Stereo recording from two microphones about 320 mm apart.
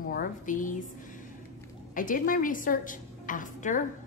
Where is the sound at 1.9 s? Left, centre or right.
Left.